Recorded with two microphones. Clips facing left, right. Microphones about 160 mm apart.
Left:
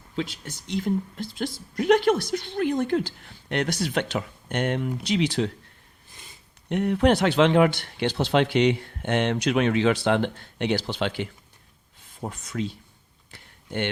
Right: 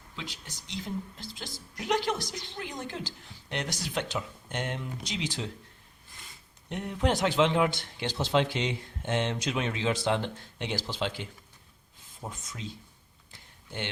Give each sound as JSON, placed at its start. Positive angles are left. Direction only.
{"t": 0.2, "sound": "a woman's voice", "side_deg": 55}
{"t": 6.7, "sound": "a woman's voice", "side_deg": 65}
{"t": 12.3, "sound": "a woman's voice", "side_deg": 60}